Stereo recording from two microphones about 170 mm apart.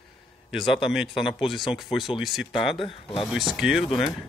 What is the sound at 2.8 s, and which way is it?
Speech, 30° left (ahead or behind).